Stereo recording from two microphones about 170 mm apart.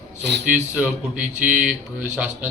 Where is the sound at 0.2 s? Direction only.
80° right.